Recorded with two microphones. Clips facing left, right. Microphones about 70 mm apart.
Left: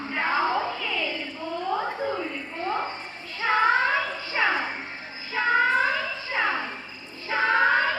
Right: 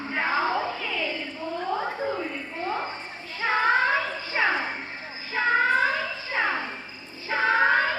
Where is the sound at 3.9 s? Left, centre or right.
Centre.